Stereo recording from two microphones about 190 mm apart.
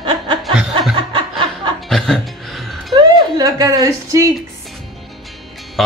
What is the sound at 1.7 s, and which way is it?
Music, centre (ahead or behind).